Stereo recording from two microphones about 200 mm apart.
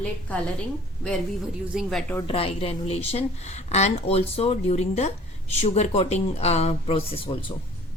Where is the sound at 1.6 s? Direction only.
Centre (ahead or behind).